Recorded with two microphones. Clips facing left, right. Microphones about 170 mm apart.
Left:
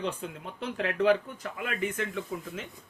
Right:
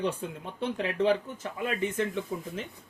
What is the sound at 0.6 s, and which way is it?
Speech, 25° right (ahead or behind).